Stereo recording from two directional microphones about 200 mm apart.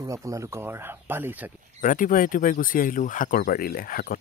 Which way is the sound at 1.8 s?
40° left (ahead or behind).